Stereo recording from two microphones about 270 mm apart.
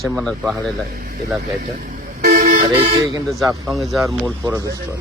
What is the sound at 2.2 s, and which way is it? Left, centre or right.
Vehicle, right.